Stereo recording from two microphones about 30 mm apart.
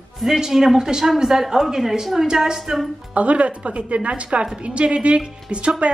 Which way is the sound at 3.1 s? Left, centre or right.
Right.